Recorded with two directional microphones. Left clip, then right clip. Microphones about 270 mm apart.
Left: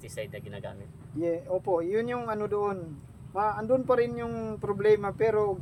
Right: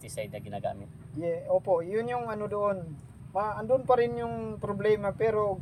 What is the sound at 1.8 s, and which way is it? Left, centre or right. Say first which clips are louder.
Speech: left 1 dB; centre.